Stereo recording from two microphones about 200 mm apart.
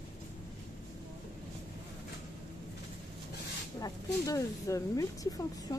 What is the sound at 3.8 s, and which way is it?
Speech, 15° left (ahead or behind).